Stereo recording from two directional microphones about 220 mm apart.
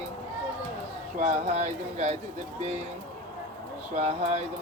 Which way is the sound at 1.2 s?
35° right (ahead or behind).